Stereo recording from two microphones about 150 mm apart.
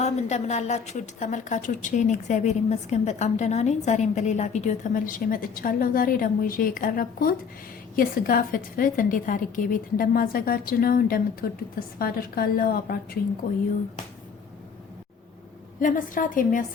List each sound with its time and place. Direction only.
0.0 s a woman's voice: 50° left (ahead or behind); by 11.4 s 75° left (ahead or behind)
11.9 s a woman's voice: 90° left
15.8 s a woman's voice: 60° left (ahead or behind)